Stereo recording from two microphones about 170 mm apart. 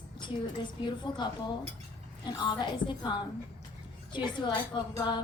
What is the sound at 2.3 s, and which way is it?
A woman's voice, 25° left (ahead or behind).